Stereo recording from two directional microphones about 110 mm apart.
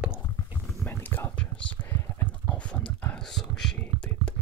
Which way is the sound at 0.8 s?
20° left (ahead or behind).